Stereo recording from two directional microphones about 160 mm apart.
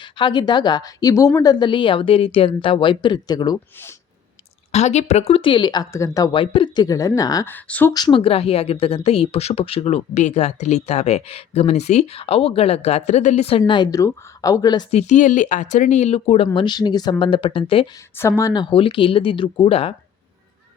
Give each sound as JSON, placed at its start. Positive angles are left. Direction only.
{"t": 0.0, "sound": "a woman's voice", "side_deg": 30}
{"t": 4.7, "sound": "a woman's voice", "side_deg": 45}
{"t": 6.4, "sound": "speech", "side_deg": 35}
{"t": 7.5, "sound": "speech", "side_deg": 10}
{"t": 7.9, "sound": "a woman's voice", "side_deg": 30}
{"t": 13.6, "sound": "speech", "side_deg": 30}
{"t": 14.8, "sound": "speech", "side_deg": 45}
{"t": 16.6, "sound": "a woman's voice", "side_deg": 25}
{"t": 18.1, "sound": "a woman's voice", "side_deg": 15}